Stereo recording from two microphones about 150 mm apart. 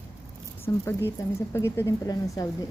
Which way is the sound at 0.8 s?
15° left (ahead or behind).